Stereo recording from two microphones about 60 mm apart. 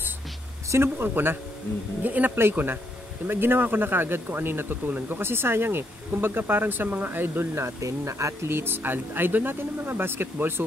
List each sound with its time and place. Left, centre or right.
0.9 s speech: right
7.5 s speech: right